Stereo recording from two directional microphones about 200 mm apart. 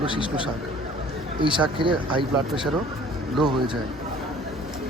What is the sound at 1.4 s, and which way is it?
Speech, 25° right (ahead or behind).